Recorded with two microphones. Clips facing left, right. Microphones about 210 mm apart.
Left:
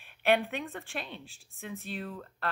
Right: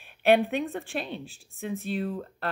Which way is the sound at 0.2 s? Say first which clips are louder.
Right 6 dB; 35° right (ahead or behind).